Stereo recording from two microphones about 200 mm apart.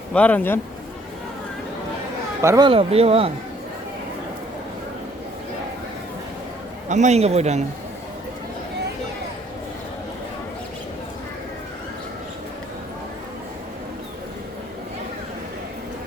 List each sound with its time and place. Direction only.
0.1 s a man's voice: 5° left (ahead or behind)
2.4 s speech: 15° right (ahead or behind)
2.6 s speech: 30° right (ahead or behind)
6.8 s speech: 35° right (ahead or behind)